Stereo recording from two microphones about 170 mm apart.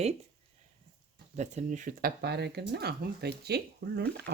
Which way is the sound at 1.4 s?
45° right (ahead or behind).